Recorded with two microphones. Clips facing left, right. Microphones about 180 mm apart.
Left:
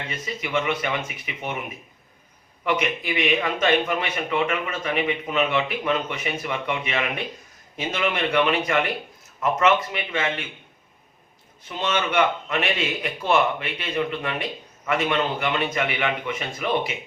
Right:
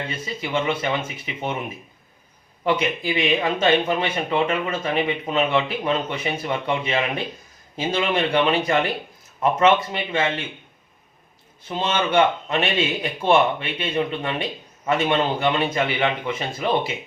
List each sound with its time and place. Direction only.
0.5 s speech: 30° right (ahead or behind)
2.6 s speech: 30° right (ahead or behind)
11.8 s speech: 30° right (ahead or behind)